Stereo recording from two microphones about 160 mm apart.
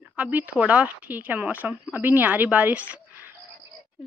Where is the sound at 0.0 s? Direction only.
10° right (ahead or behind).